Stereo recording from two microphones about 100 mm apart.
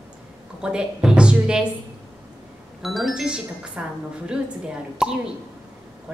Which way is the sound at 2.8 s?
Centre (ahead or behind).